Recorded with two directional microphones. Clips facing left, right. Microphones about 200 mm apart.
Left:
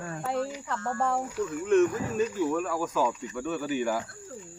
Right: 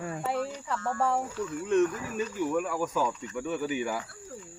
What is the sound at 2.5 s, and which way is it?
Speech, 10° right (ahead or behind).